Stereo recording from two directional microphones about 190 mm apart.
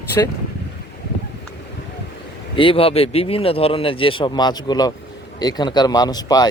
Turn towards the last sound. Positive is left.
turn(degrees=20)  # may be behind; listen again after turning